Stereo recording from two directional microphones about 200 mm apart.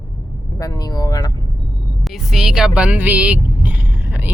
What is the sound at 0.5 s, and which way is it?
Speech, 15° left (ahead or behind).